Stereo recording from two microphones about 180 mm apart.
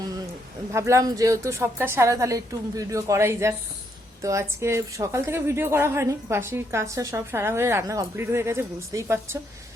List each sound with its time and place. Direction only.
0.7 s a woman's voice: 15° right (ahead or behind)